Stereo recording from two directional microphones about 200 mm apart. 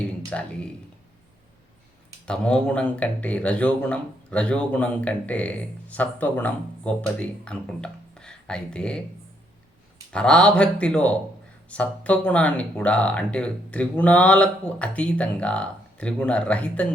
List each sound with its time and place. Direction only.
0.3 s speech: 5° left (ahead or behind)
2.2 s speech: 5° left (ahead or behind)
10.1 s speech: 5° left (ahead or behind)